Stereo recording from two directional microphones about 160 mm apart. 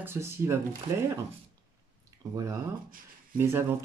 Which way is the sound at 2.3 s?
20° right (ahead or behind).